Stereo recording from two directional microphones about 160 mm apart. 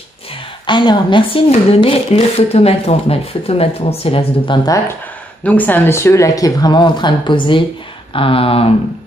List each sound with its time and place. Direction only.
0.7 s speech: 30° left (ahead or behind)
4.6 s speech: 20° left (ahead or behind)
5.4 s speech: 10° left (ahead or behind); by 8.7 s 35° left (ahead or behind)